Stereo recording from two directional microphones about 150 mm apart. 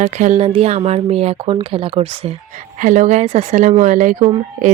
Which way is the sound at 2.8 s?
55° right (ahead or behind).